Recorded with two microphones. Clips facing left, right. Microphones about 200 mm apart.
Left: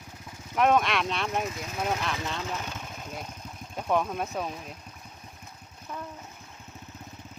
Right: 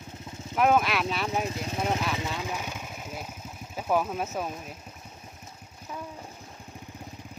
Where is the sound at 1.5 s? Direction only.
30° right (ahead or behind).